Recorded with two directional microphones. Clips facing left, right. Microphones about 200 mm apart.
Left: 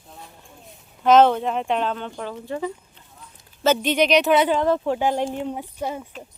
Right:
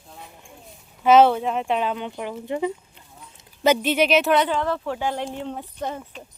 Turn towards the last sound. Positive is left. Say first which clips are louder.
# left 1 dB
turn(degrees=10)  # may be behind; listen again after turning